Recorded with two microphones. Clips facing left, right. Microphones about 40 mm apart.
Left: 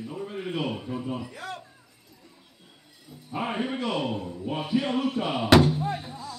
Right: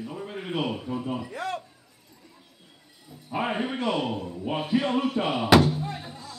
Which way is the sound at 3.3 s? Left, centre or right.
Centre.